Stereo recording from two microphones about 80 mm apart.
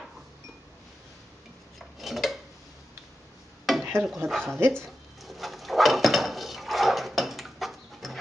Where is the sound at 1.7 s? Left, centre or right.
Centre.